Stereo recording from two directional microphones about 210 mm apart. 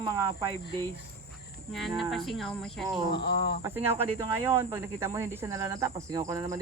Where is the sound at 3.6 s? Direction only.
10° right (ahead or behind).